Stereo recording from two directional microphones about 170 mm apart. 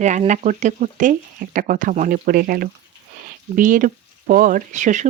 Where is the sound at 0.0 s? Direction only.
45° right (ahead or behind).